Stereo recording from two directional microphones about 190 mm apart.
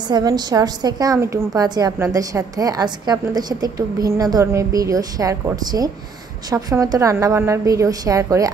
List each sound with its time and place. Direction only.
0.1 s a woman's voice: 20° right (ahead or behind)